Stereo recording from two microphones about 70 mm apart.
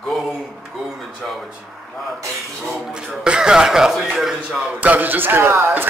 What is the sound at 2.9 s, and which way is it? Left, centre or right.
Speech, centre.